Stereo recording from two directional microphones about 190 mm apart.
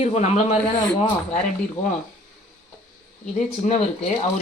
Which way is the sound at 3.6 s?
35° left (ahead or behind).